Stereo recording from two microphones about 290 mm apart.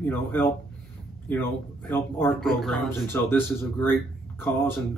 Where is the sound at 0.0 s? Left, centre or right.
Centre.